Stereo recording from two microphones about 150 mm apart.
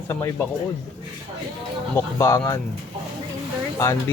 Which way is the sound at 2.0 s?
20° left (ahead or behind).